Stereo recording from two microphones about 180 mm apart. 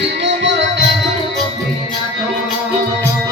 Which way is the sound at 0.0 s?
80° right.